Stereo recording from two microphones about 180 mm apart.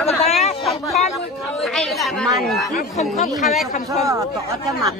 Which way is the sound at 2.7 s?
45° left (ahead or behind).